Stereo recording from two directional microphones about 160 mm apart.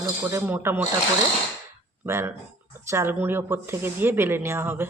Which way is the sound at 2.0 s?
15° right (ahead or behind).